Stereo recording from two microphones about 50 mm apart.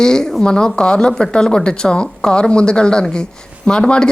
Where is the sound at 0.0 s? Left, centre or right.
Centre.